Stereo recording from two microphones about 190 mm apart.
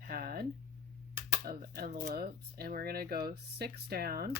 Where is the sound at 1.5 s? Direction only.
55° right (ahead or behind).